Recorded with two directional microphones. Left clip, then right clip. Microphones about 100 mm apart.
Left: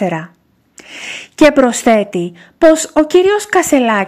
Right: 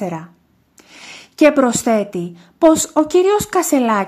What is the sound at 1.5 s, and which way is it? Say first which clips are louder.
Speech: left 4 dB; 25° left (ahead or behind).